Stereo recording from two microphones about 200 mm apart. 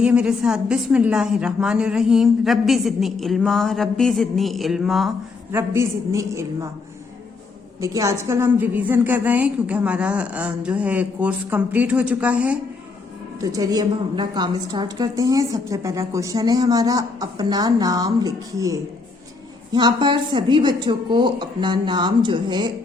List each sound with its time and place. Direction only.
0.0 s a woman's voice: 5° right (ahead or behind)
5.5 s a woman's voice: 10° right (ahead or behind)
7.8 s a woman's voice: 15° right (ahead or behind)
13.4 s a woman's voice: 20° right (ahead or behind)